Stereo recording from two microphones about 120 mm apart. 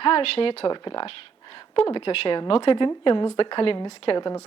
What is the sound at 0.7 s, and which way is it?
Speech, 45° left (ahead or behind).